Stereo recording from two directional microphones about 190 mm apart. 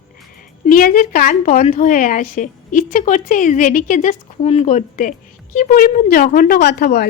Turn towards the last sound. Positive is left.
turn(degrees=55)  # may be behind; listen again after turning